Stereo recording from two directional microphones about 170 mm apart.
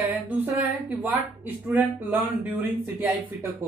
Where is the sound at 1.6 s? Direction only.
10° right (ahead or behind).